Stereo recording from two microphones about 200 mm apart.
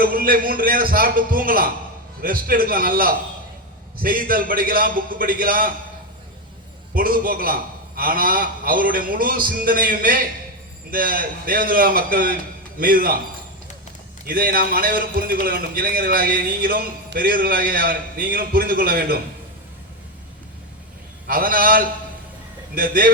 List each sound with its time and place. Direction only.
0.0 s a man's voice: 45° right (ahead or behind)
6.9 s a man's voice: 45° right (ahead or behind)
14.3 s a man's voice: 45° right (ahead or behind)
21.2 s a man's voice: 45° right (ahead or behind)